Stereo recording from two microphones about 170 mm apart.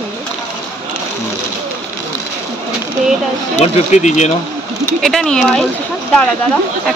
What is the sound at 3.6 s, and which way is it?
Speech, 40° left (ahead or behind).